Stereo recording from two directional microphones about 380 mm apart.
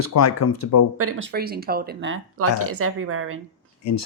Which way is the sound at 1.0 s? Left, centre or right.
Right.